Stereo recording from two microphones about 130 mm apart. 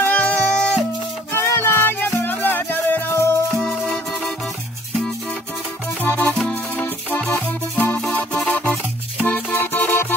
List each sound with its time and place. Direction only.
0.0 s music: 15° left (ahead or behind)
6.0 s music: 15° left (ahead or behind)
6.3 s music: 5° left (ahead or behind)